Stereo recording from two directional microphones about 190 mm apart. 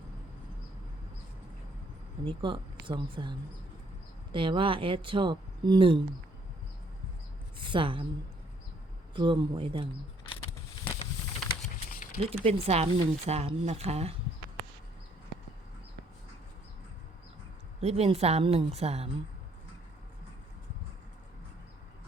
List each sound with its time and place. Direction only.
2.2 s speech: 25° right (ahead or behind)
7.6 s speech: 25° right (ahead or behind)
9.1 s speech: 25° right (ahead or behind)
12.2 s a woman's voice: 30° right (ahead or behind)
17.7 s a woman's voice: 30° right (ahead or behind)